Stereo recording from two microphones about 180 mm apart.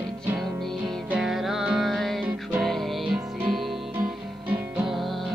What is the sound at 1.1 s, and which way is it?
Music, centre (ahead or behind).